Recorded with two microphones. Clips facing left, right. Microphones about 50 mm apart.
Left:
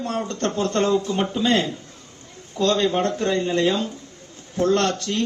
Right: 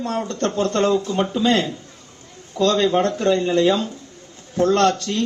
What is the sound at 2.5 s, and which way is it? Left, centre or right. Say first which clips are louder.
Speech: right 3 dB; right.